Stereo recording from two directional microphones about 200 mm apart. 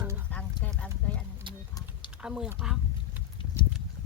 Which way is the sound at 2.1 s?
5° right (ahead or behind).